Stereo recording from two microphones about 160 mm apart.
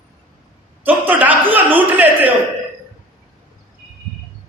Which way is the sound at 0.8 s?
10° right (ahead or behind).